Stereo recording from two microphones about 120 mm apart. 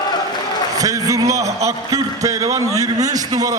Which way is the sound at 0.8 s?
30° right (ahead or behind).